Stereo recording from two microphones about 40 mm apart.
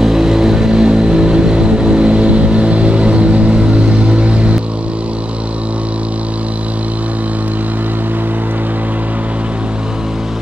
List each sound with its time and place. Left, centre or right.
0.0 s vehicle: centre; by 4.6 s right